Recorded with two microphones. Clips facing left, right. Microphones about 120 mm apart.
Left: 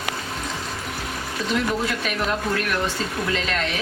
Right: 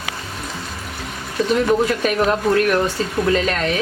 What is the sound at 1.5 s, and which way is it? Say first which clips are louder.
Speech: right 6 dB; 40° right (ahead or behind).